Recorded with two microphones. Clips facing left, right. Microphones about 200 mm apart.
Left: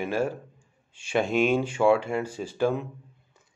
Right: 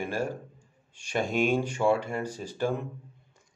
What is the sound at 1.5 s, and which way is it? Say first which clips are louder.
Speech: left 4 dB; 10° left (ahead or behind).